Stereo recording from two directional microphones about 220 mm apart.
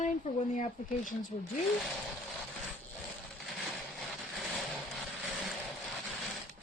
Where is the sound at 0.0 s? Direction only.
35° left (ahead or behind).